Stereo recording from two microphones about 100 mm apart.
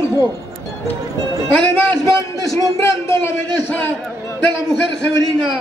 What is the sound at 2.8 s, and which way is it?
Speech, 25° left (ahead or behind).